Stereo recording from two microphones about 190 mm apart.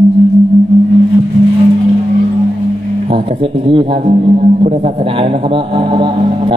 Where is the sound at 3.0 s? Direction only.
30° right (ahead or behind).